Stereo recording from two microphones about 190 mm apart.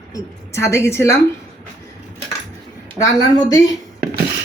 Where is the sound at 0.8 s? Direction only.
15° left (ahead or behind).